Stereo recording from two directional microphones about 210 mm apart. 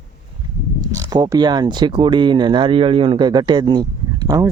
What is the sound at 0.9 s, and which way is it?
Speech, 15° right (ahead or behind).